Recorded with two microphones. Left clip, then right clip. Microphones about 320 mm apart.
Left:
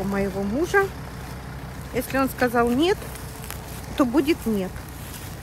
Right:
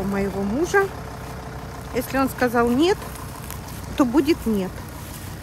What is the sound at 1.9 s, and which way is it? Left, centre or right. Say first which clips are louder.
Speech: right 1 dB; centre.